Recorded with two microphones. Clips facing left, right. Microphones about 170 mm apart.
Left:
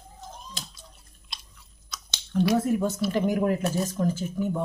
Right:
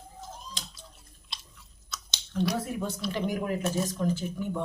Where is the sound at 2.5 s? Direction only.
45° left (ahead or behind).